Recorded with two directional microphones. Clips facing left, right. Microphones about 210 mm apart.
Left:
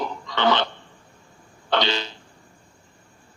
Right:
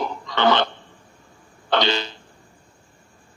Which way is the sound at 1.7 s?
50° right (ahead or behind).